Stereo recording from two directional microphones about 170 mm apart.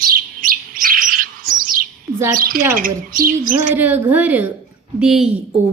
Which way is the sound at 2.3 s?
60° right (ahead or behind).